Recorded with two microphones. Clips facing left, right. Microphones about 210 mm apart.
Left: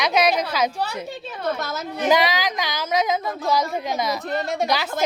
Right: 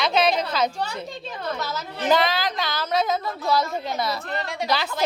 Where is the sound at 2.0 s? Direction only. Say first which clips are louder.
Left 1 dB; 10° left (ahead or behind).